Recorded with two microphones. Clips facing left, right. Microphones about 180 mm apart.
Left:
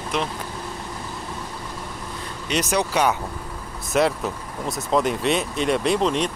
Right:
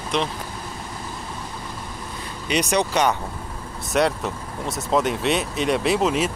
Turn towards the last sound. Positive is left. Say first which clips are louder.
# even
turn(degrees=-5)  # may be behind; listen again after turning